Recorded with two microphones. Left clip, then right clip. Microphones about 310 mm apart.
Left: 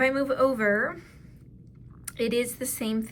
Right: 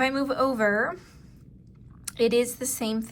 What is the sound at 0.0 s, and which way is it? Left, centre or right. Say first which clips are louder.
Speech: left 1 dB; centre.